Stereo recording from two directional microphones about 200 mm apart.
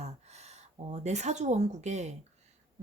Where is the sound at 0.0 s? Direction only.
35° right (ahead or behind).